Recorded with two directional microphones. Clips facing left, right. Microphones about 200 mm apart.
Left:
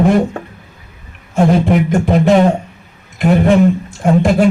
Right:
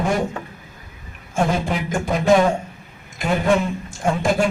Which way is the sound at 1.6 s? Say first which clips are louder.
Left 10 dB; 60° left (ahead or behind).